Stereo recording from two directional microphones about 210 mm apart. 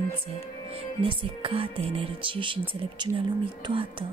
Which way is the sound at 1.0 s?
25° right (ahead or behind).